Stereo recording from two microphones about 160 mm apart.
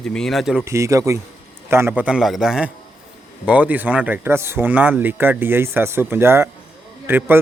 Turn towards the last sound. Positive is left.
turn(degrees=-15)  # may be behind; listen again after turning